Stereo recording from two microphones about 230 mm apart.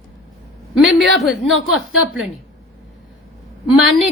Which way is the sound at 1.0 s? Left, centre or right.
Centre.